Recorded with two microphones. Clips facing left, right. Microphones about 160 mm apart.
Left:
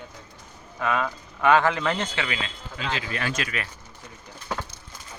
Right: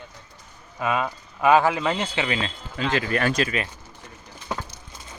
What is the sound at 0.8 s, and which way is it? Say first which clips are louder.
Speech: right 1 dB; 15° right (ahead or behind).